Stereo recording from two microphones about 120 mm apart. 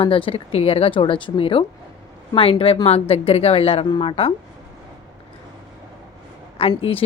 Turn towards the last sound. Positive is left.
turn(degrees=50)  # may be behind; listen again after turning